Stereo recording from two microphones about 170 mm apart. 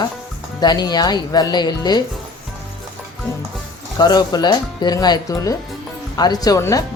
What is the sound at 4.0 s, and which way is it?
Speech, 25° left (ahead or behind).